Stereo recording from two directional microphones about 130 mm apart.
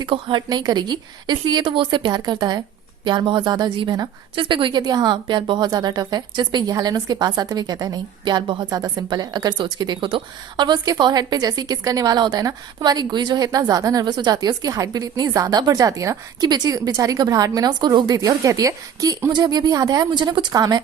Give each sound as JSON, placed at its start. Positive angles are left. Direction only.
{"t": 0.0, "sound": "a woman's voice", "side_deg": -35}